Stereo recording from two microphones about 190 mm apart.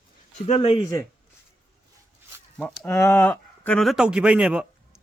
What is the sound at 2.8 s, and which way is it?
Speech, 15° left (ahead or behind).